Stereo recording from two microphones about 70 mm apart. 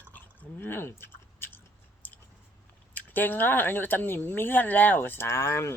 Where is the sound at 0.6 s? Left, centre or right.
Left.